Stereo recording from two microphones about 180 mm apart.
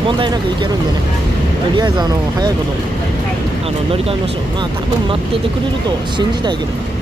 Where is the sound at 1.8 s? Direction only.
20° right (ahead or behind).